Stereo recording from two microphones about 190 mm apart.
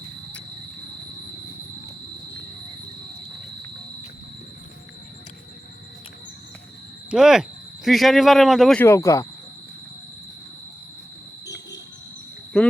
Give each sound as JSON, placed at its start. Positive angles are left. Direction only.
{"t": 7.1, "sound": "speech", "side_deg": -5}
{"t": 8.8, "sound": "speech", "side_deg": 15}
{"t": 11.4, "sound": "music", "side_deg": 65}
{"t": 12.5, "sound": "a sound", "side_deg": 5}